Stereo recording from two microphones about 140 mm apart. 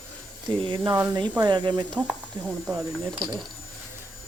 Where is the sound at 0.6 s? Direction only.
35° right (ahead or behind).